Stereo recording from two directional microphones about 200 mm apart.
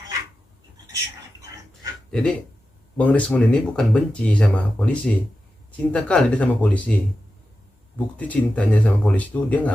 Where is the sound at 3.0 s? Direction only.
5° left (ahead or behind).